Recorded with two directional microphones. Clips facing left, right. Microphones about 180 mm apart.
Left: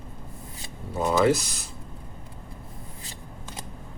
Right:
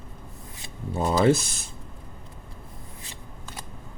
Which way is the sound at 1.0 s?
25° right (ahead or behind).